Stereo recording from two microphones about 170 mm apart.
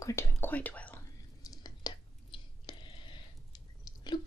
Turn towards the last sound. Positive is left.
turn(degrees=25)  # may be behind; listen again after turning